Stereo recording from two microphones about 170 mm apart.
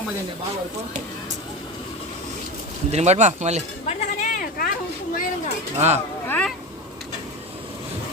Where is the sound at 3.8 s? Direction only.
50° left (ahead or behind).